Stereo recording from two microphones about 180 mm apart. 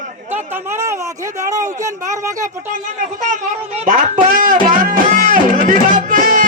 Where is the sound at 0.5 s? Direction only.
15° right (ahead or behind).